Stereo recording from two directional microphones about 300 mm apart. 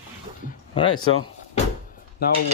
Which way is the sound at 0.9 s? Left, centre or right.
Left.